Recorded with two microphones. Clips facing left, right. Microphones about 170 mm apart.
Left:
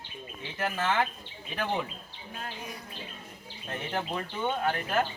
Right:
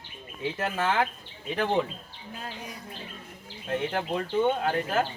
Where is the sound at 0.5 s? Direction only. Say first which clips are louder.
Right 1 dB; 25° right (ahead or behind).